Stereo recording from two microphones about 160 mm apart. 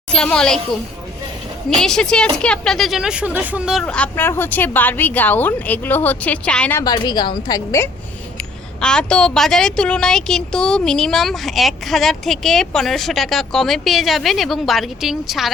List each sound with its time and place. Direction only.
0.1 s a woman's voice: 5° left (ahead or behind)
1.8 s a woman's voice: 5° left (ahead or behind)
3.8 s a woman's voice: 10° left (ahead or behind)
6.8 s a woman's voice: 25° left (ahead or behind)
8.8 s a woman's voice: 5° left (ahead or behind)